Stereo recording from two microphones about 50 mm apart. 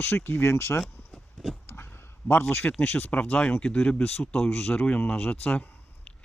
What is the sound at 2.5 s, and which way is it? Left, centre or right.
Speech, left.